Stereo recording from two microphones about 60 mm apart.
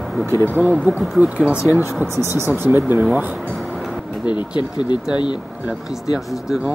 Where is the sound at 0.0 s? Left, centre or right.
Centre.